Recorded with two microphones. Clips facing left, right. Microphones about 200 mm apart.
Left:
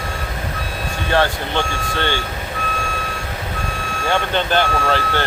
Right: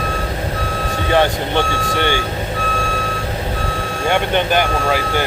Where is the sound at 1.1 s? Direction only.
15° right (ahead or behind).